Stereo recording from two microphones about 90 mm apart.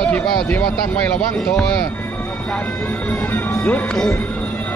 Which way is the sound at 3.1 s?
30° left (ahead or behind).